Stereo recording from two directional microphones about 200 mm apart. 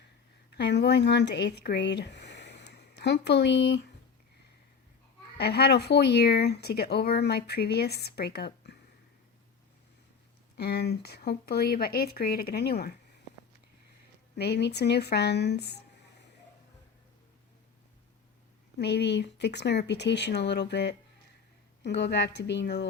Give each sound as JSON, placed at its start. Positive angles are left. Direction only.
{"t": 0.5, "sound": "speech", "side_deg": 55}
{"t": 5.4, "sound": "speech", "side_deg": 55}
{"t": 10.6, "sound": "speech", "side_deg": 55}
{"t": 14.3, "sound": "speech", "side_deg": 55}
{"t": 18.8, "sound": "speech", "side_deg": 55}